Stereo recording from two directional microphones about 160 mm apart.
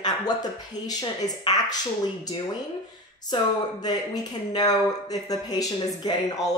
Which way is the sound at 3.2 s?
25° left (ahead or behind).